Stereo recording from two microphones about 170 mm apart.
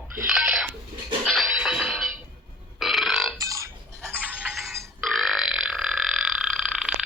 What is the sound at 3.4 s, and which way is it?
Chicken, 20° right (ahead or behind).